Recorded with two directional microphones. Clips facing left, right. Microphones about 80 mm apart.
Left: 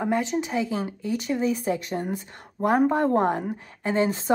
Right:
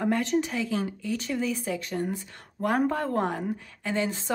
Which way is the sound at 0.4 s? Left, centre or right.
Left.